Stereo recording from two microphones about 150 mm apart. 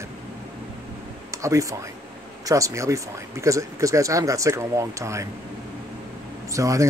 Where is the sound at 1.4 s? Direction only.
20° right (ahead or behind).